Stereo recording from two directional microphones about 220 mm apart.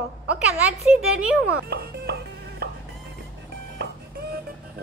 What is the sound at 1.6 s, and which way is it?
Music, 45° right (ahead or behind).